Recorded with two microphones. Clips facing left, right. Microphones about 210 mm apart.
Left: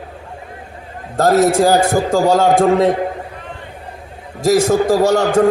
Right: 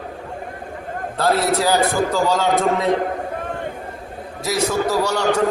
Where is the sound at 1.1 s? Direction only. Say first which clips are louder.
Left 7 dB; 45° left (ahead or behind).